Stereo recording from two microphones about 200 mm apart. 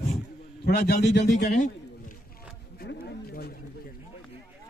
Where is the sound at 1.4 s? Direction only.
35° left (ahead or behind).